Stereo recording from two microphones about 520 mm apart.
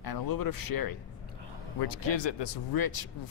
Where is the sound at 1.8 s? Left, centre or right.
Left.